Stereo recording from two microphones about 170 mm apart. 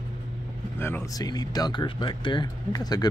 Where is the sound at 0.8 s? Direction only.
15° left (ahead or behind).